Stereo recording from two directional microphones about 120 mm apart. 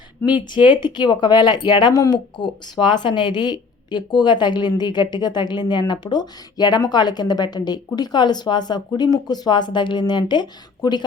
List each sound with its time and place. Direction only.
0.7 s speech: 40° left (ahead or behind)